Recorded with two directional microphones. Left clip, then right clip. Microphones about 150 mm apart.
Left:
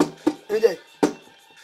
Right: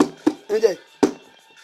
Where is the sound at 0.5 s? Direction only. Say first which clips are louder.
Right 1 dB; 20° right (ahead or behind).